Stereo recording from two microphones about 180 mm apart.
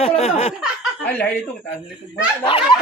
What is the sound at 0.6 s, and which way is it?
Speech, 5° left (ahead or behind).